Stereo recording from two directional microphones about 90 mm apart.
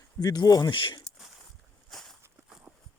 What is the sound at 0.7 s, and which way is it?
Speech, 65° left (ahead or behind).